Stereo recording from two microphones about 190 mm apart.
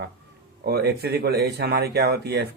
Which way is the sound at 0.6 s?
55° right (ahead or behind).